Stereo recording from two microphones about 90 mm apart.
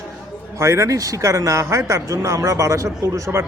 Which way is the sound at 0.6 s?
30° right (ahead or behind).